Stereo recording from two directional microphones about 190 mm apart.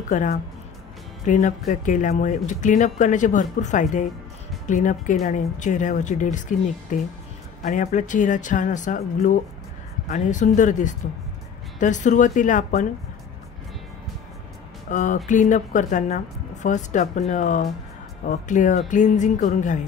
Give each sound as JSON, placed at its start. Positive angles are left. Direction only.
{"t": 0.1, "sound": "speech", "side_deg": 40}
{"t": 14.9, "sound": "speech", "side_deg": 40}